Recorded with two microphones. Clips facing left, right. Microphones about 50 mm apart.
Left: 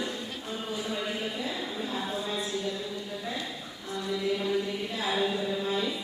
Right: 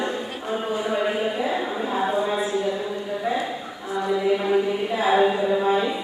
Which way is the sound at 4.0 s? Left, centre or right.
Right.